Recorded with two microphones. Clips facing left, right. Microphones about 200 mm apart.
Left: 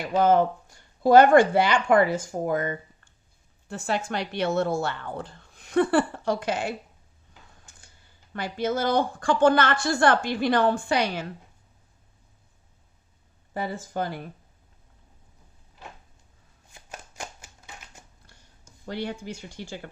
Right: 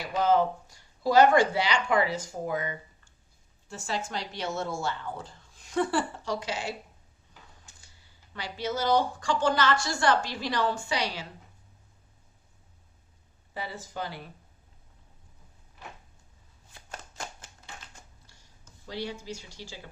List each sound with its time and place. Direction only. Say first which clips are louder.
0.0 s a woman's voice: left 4 dB; 55° left (ahead or behind)
7.6 s a sound: left 2 dB; 50° left (ahead or behind)
8.3 s a woman's voice: left 6 dB; 50° left (ahead or behind)
13.5 s speech: left 7 dB; 50° left (ahead or behind)
16.7 s shuffling cards: left 1 dB; 10° left (ahead or behind)
18.3 s a sound: left 3 dB; 55° left (ahead or behind)
18.9 s a woman's voice: left 4 dB; 55° left (ahead or behind)